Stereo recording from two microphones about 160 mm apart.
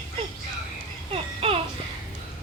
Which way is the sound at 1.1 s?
35° right (ahead or behind).